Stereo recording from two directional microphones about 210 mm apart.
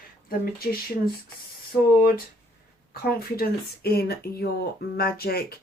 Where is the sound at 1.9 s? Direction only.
45° left (ahead or behind).